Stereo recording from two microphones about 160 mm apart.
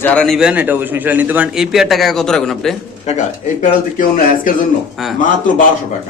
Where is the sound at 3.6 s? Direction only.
55° left (ahead or behind).